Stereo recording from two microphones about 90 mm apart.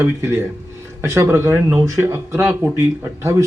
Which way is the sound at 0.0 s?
30° right (ahead or behind).